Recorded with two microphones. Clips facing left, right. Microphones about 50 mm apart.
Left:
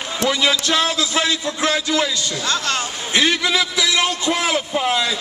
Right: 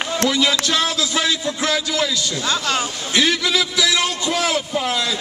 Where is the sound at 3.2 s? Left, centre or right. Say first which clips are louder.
Left 1 dB; centre.